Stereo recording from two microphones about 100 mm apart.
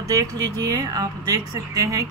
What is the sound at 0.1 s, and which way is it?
Speech, 35° right (ahead or behind).